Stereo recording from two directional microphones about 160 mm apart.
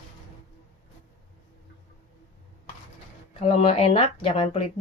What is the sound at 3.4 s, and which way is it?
Speech, 40° left (ahead or behind).